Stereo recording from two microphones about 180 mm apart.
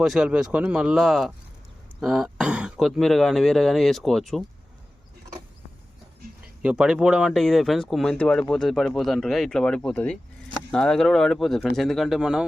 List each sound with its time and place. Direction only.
0.0 s speech: centre (ahead or behind)
6.6 s speech: 5° right (ahead or behind)